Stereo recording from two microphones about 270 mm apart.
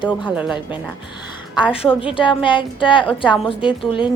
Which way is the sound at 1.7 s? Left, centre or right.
Centre.